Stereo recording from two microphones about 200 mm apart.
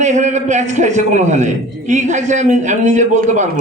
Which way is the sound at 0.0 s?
35° right (ahead or behind).